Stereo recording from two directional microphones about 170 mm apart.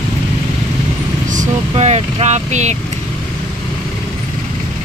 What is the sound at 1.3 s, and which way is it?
Speech, 45° right (ahead or behind).